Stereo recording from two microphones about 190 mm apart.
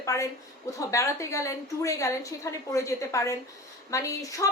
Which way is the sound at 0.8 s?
15° left (ahead or behind).